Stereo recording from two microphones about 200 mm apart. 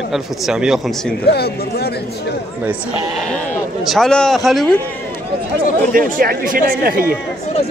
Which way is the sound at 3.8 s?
Centre (ahead or behind).